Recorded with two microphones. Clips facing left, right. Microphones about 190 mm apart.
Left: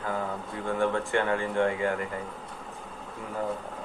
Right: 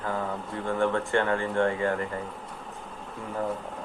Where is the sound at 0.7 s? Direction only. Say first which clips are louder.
Right 1 dB; 15° left (ahead or behind).